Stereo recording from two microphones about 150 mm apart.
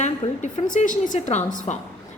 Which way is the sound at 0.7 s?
60° left (ahead or behind).